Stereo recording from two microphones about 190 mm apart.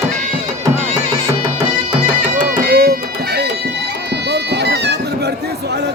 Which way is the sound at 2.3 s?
50° right (ahead or behind).